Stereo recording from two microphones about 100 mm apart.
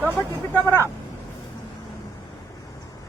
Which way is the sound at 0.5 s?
25° left (ahead or behind).